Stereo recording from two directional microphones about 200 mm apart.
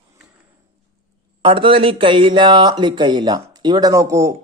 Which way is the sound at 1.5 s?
25° right (ahead or behind).